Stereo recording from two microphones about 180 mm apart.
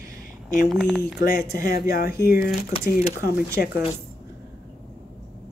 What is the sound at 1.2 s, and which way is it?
Speech, 55° left (ahead or behind).